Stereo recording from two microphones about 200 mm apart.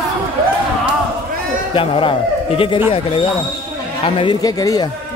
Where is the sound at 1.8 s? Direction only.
25° left (ahead or behind).